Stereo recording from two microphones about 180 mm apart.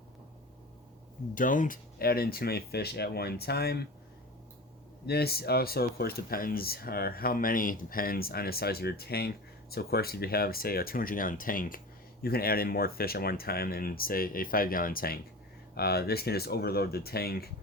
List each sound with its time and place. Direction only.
1.4 s speech: 45° left (ahead or behind)
5.0 s speech: 60° left (ahead or behind)